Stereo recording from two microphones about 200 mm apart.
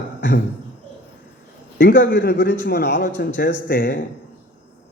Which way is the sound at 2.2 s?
50° left (ahead or behind).